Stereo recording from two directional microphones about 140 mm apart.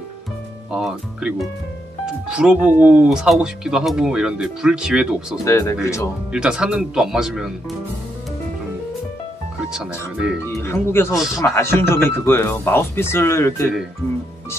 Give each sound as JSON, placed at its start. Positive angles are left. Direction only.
{"t": 0.7, "sound": "speech", "side_deg": -5}
{"t": 5.4, "sound": "speech", "side_deg": 20}
{"t": 6.3, "sound": "speech", "side_deg": -5}
{"t": 9.6, "sound": "speech", "side_deg": -5}
{"t": 10.4, "sound": "speech", "side_deg": 20}